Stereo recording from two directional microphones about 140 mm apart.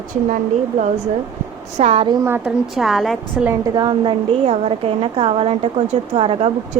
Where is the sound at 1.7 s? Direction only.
50° right (ahead or behind).